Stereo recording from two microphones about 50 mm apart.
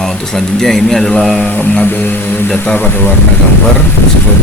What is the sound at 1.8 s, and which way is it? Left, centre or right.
Music, left.